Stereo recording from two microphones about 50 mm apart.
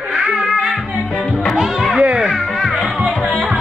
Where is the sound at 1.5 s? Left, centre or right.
Centre.